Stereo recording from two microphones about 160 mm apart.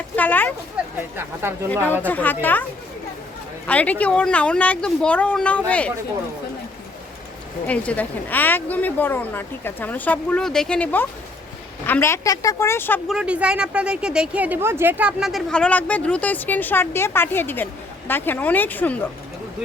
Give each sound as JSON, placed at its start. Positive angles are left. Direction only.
{"t": 0.2, "sound": "a sound", "side_deg": 10}
{"t": 0.8, "sound": "a sound", "side_deg": -5}
{"t": 1.1, "sound": "speech", "side_deg": -15}
{"t": 1.7, "sound": "a woman's voice", "side_deg": 10}
{"t": 3.7, "sound": "a woman's voice", "side_deg": 10}
{"t": 7.7, "sound": "a woman's voice", "side_deg": 10}
{"t": 13.1, "sound": "a woman's voice", "side_deg": -5}